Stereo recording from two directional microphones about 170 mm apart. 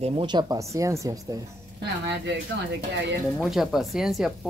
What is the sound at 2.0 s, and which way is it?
Speech, 90° right.